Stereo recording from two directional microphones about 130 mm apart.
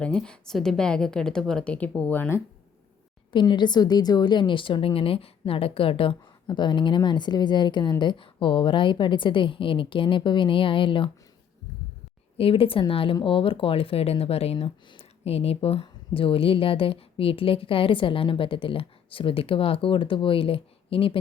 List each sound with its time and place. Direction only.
0.0 s a woman's voice: 5° left (ahead or behind)
3.3 s a woman's voice: 35° left (ahead or behind)
12.4 s speech: 45° left (ahead or behind)